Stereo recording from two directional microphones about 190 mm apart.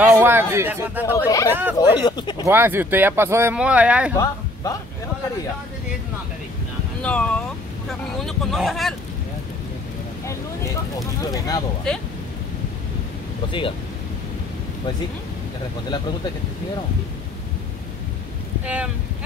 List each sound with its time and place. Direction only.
0.0 s speech: 10° right (ahead or behind)
1.1 s speech: 15° left (ahead or behind)
1.5 s speech: 10° right (ahead or behind)
1.8 s speech: 20° left (ahead or behind)
2.4 s speech: 10° right (ahead or behind)
7.0 s speech: 5° left (ahead or behind)
11.0 s speech: 20° left (ahead or behind)
11.9 s speech: 5° left (ahead or behind)
13.5 s speech: 25° left (ahead or behind)